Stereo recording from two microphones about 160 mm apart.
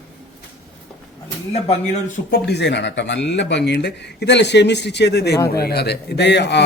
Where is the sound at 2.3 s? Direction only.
90° left.